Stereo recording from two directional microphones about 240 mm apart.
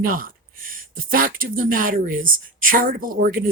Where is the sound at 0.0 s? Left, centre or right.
Right.